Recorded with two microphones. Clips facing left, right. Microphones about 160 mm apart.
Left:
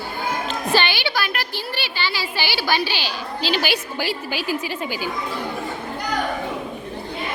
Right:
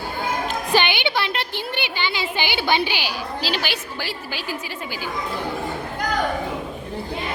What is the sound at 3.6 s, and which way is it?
A woman's voice, 15° left (ahead or behind).